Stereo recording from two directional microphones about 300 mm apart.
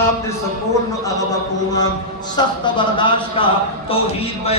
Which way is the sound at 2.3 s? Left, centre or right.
Centre.